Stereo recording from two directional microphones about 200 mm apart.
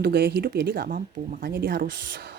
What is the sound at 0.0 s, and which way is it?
Speech, 55° right (ahead or behind).